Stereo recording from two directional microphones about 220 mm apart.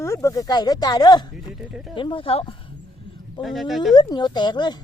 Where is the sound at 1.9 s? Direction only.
20° left (ahead or behind).